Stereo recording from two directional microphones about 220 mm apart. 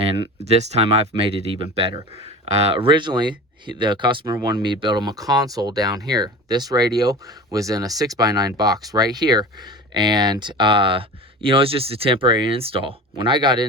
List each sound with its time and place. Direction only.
0.4 s speech: 30° right (ahead or behind)